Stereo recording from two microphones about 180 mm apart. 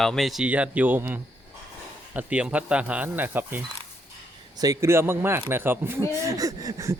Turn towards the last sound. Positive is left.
turn(degrees=-20)  # may be behind; listen again after turning